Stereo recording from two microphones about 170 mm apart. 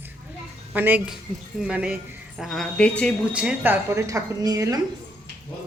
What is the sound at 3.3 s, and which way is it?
A woman's voice, 10° right (ahead or behind).